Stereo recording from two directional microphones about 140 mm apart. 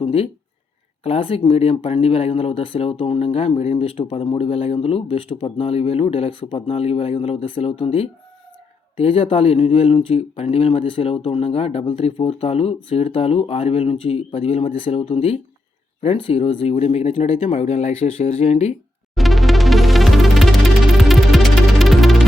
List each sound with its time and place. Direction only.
0.0 s speech: 40° left (ahead or behind)
17.2 s speech: 60° left (ahead or behind)
19.1 s music: centre (ahead or behind)